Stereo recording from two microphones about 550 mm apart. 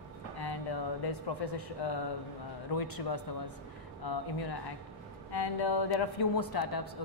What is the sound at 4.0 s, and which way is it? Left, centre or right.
A woman's voice, left.